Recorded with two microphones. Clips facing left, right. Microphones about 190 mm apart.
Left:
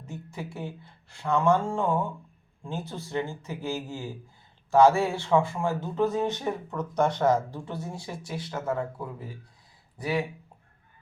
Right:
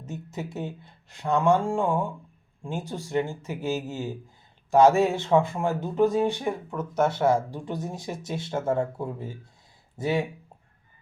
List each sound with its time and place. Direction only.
0.0 s speech: 20° right (ahead or behind)